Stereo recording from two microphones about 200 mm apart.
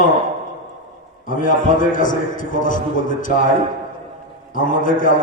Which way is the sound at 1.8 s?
40° left (ahead or behind).